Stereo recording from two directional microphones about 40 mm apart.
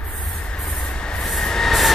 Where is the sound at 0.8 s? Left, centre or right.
Left.